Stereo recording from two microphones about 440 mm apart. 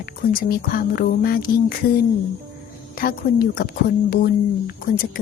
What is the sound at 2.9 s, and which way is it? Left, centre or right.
Speech, centre.